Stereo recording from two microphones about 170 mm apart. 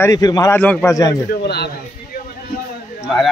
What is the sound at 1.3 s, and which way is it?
Speech, 70° left (ahead or behind).